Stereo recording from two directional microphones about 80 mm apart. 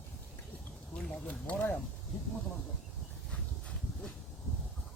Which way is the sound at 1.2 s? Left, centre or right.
Centre.